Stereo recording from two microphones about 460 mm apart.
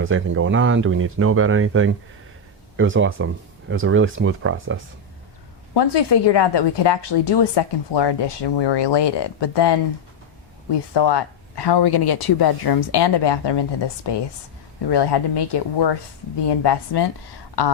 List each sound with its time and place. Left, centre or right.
0.0 s speech: right
5.7 s a woman's voice: left